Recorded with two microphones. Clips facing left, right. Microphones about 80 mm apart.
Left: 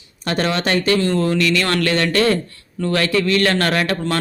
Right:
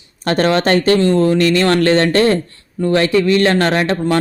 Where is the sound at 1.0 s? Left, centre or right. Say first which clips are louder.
Right 5 dB; right.